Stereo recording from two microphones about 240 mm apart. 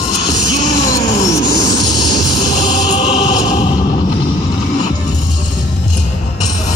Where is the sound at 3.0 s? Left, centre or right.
Left.